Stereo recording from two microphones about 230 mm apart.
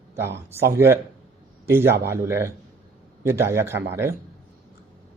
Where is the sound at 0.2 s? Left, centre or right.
Centre.